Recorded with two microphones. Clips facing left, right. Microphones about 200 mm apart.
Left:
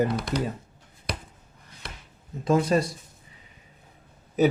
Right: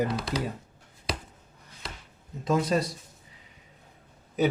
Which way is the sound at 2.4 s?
50° left (ahead or behind).